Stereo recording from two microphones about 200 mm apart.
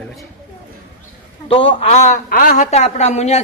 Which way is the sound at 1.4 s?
25° left (ahead or behind).